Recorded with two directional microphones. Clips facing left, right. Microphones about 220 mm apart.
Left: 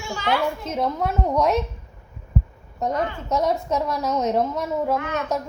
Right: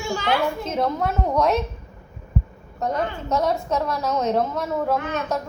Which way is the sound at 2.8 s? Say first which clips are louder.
Even; 15° left (ahead or behind).